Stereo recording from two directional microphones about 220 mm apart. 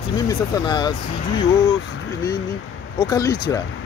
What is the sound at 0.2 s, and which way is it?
Speech, 20° left (ahead or behind).